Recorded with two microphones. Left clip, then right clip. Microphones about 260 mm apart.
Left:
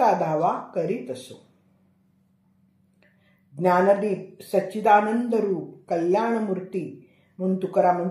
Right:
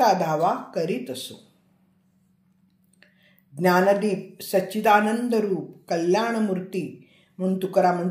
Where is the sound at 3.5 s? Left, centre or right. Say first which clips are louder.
Even; right.